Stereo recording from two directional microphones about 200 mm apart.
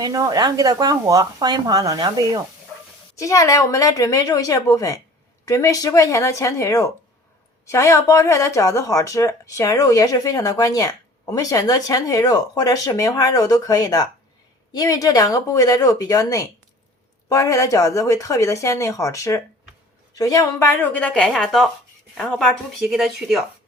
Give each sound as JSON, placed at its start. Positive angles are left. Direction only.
{"t": 0.0, "sound": "a woman's voice", "side_deg": -20}
{"t": 3.2, "sound": "speech", "side_deg": 15}